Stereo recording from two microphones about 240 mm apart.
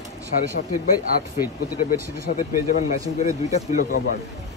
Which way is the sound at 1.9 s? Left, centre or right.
Left.